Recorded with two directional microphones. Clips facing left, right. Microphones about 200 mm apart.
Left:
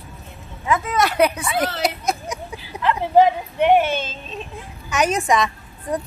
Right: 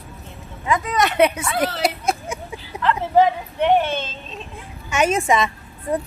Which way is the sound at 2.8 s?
10° left (ahead or behind).